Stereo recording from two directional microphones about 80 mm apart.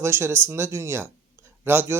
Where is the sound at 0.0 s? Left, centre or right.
Right.